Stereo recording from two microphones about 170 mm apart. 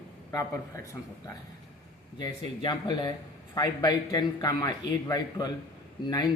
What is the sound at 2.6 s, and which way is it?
Speech, 25° left (ahead or behind).